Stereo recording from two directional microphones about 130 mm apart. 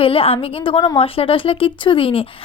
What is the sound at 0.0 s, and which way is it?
A woman's voice, 45° left (ahead or behind).